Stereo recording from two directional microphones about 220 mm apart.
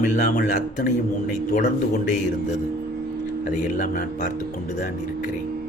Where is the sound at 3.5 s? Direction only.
35° left (ahead or behind).